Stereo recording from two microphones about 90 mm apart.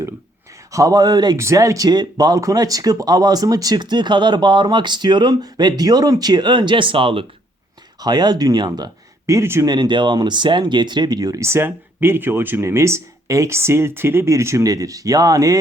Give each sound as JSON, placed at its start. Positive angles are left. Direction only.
{"t": 0.7, "sound": "speech", "side_deg": -40}
{"t": 1.4, "sound": "speech", "side_deg": -35}
{"t": 8.0, "sound": "speech", "side_deg": -50}
{"t": 9.2, "sound": "speech", "side_deg": -30}
{"t": 9.6, "sound": "speech", "side_deg": -55}